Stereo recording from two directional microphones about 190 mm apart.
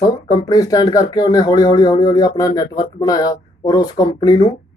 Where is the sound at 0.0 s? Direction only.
20° left (ahead or behind).